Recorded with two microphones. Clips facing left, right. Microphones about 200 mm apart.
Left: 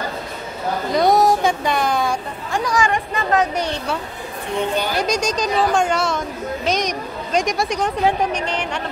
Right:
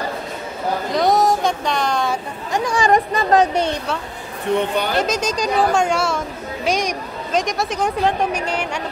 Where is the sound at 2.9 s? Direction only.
40° right (ahead or behind).